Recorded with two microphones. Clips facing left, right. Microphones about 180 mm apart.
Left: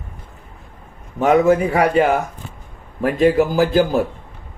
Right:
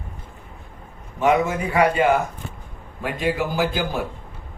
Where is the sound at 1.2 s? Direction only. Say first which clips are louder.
Left 6 dB; 40° left (ahead or behind).